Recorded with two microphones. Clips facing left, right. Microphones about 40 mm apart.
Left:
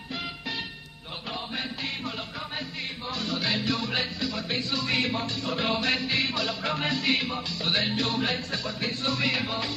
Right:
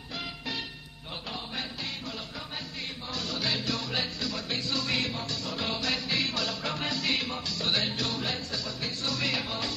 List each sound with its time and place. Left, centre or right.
3.1 s music: left
5.0 s music: left